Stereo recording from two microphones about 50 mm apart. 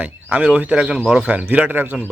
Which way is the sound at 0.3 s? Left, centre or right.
Right.